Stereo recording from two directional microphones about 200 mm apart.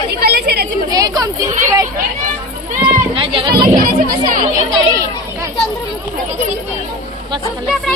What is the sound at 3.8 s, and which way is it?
Speech, 45° right (ahead or behind).